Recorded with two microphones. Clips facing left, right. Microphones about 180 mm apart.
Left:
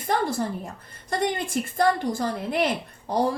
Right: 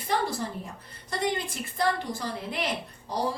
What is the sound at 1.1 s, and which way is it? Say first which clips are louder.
Speech: left 4 dB; 50° left (ahead or behind).